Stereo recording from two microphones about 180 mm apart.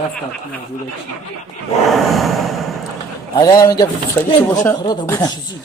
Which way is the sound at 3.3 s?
20° left (ahead or behind).